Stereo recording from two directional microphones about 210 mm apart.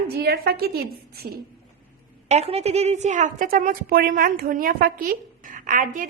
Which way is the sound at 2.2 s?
30° right (ahead or behind).